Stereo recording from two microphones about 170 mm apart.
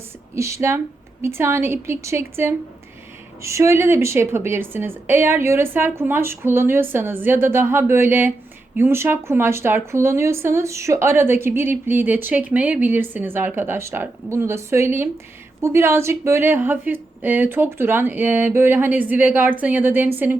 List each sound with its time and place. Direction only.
0.3 s speech: 15° right (ahead or behind)